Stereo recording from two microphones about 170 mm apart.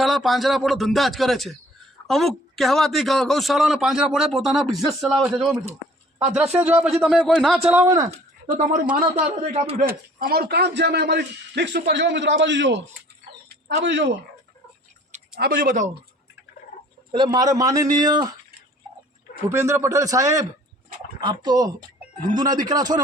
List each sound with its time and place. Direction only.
0.0 s a man's voice: centre (ahead or behind)
6.6 s a man's voice: 15° right (ahead or behind)
6.8 s a man's voice: centre (ahead or behind); by 8.1 s 15° right (ahead or behind)
9.5 s a man's voice: 40° right (ahead or behind)
9.7 s speech: 60° right (ahead or behind); by 12.8 s 90° right
13.8 s speech: 90° right
15.4 s speech: 65° right (ahead or behind)
17.1 s a man's voice: 25° right (ahead or behind)
19.5 s a man's voice: 15° right (ahead or behind)